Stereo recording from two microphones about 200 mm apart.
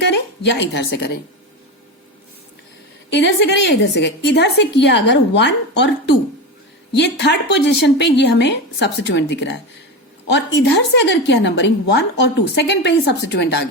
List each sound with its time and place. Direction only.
0.0 s a woman's voice: 60° left (ahead or behind)
3.1 s a woman's voice: 60° left (ahead or behind)